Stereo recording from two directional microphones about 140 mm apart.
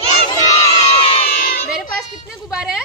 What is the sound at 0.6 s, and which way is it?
Crowd, 45° left (ahead or behind).